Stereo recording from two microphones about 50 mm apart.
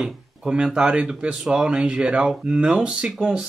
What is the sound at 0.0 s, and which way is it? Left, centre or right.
Speech, centre.